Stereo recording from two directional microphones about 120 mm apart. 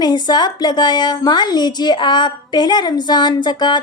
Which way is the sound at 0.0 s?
35° left (ahead or behind).